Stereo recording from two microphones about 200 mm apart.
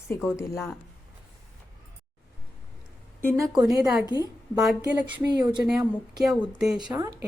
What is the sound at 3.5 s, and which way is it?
Speech, 20° right (ahead or behind).